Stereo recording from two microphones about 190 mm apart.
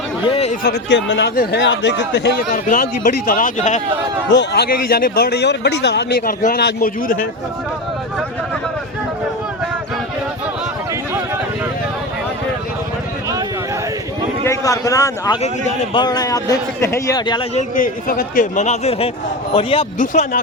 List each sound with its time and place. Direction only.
0.6 s speech: 60° left (ahead or behind)
2.5 s a man's voice: 45° left (ahead or behind)
4.3 s a man's voice: 60° left (ahead or behind)
14.4 s a man's voice: 15° left (ahead or behind)
17.6 s speech: 45° left (ahead or behind)
20.0 s a man's voice: 45° left (ahead or behind)